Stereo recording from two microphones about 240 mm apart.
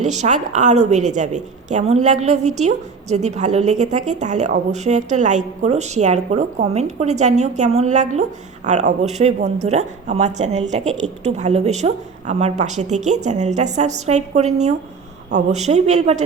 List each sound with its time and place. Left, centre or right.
0.0 s a woman's voice: right